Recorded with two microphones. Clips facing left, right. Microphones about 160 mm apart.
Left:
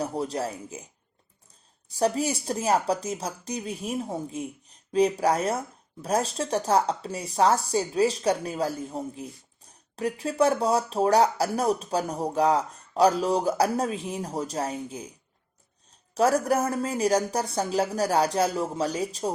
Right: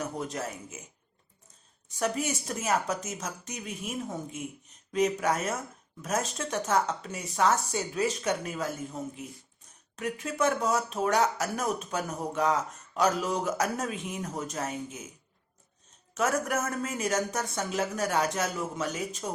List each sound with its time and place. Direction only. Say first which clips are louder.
0.0 s speech: left 5 dB; 35° left (ahead or behind)
16.1 s speech: left 6 dB; 35° left (ahead or behind)